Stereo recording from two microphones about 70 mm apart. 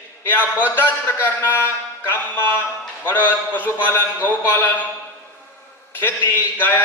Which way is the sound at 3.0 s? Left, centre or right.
Left.